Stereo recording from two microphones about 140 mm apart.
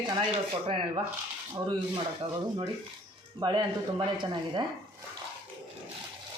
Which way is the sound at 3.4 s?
35° right (ahead or behind).